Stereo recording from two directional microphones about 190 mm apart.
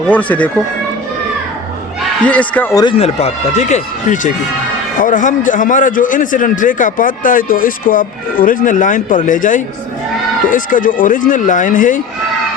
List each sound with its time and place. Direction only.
0.1 s speech: 5° left (ahead or behind)
2.2 s speech: 5° left (ahead or behind)
2.8 s a man's voice: 35° left (ahead or behind)